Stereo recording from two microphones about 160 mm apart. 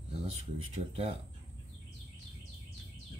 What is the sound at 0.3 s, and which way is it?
Speech, 40° right (ahead or behind).